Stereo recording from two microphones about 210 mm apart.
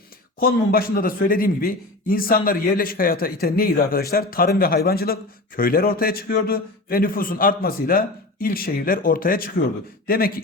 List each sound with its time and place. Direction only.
0.3 s a man's voice: 45° left (ahead or behind)